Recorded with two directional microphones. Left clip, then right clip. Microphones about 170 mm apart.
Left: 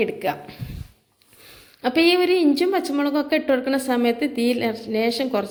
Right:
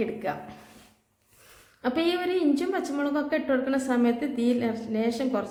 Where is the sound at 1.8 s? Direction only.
25° left (ahead or behind).